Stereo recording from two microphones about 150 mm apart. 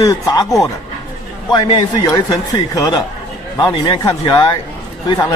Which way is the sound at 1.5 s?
30° left (ahead or behind).